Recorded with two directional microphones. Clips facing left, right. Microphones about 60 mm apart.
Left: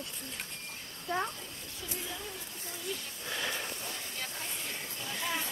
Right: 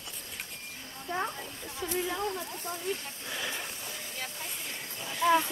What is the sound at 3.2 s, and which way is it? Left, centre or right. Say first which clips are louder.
Speech: left 1 dB; centre.